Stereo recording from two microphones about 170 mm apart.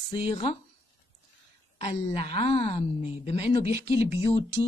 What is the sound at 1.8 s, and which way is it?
A woman's voice, 35° left (ahead or behind).